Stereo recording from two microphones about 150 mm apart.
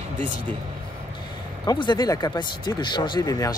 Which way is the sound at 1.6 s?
30° left (ahead or behind).